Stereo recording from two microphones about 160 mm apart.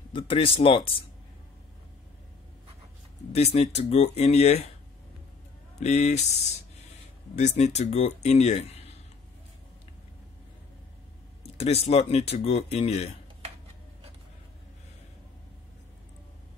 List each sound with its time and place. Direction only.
0.1 s speech: 35° left (ahead or behind)
3.3 s speech: 40° left (ahead or behind)
5.8 s speech: 45° left (ahead or behind)
7.3 s speech: 45° left (ahead or behind)
11.4 s speech: 40° left (ahead or behind)